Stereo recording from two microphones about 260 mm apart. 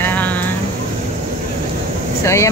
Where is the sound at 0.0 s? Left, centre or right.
Centre.